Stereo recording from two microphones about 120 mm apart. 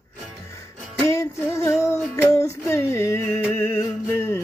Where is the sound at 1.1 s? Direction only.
25° left (ahead or behind).